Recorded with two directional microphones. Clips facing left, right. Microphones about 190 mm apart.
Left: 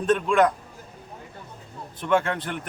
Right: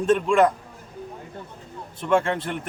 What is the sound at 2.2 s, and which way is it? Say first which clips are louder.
Speech: right 3 dB; 30° right (ahead or behind).